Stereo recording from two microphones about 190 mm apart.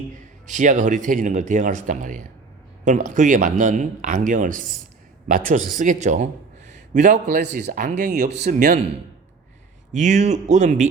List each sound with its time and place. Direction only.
0.4 s a man's voice: 40° right (ahead or behind)
9.9 s speech: 40° right (ahead or behind)